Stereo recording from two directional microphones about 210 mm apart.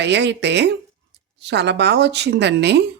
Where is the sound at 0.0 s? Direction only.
55° right (ahead or behind).